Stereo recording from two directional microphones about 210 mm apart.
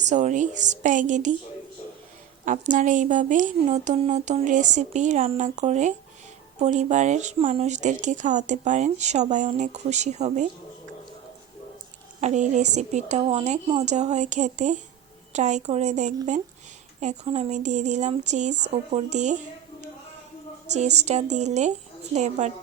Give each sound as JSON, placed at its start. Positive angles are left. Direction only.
{"t": 0.0, "sound": "speech", "side_deg": -35}
{"t": 2.4, "sound": "speech", "side_deg": -35}
{"t": 12.2, "sound": "speech", "side_deg": -35}
{"t": 20.7, "sound": "speech", "side_deg": -30}